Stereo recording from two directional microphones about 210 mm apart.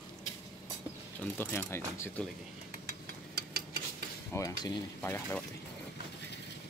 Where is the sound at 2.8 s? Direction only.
50° right (ahead or behind).